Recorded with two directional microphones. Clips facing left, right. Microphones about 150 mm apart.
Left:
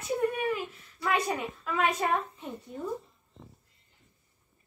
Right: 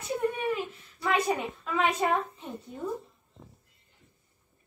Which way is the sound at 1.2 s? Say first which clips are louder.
Right 3 dB; centre (ahead or behind).